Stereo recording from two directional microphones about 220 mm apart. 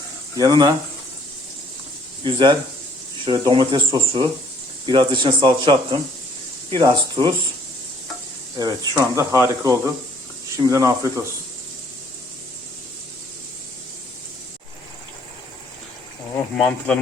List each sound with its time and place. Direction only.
0.3 s speech: 20° right (ahead or behind)
2.2 s speech: 20° right (ahead or behind)
8.5 s speech: 15° right (ahead or behind)
16.6 s speech: 5° left (ahead or behind)